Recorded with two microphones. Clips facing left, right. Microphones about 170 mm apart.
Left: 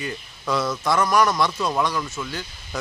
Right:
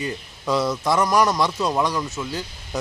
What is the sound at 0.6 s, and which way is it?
Speech, 15° right (ahead or behind).